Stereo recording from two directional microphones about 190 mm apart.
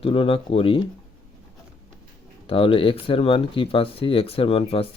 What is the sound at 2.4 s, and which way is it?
Speech, 30° left (ahead or behind).